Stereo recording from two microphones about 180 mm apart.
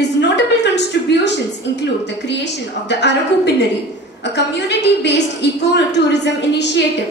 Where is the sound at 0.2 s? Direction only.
75° left (ahead or behind).